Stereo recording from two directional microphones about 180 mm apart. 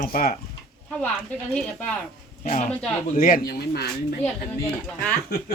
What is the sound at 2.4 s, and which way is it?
Speech, 45° left (ahead or behind).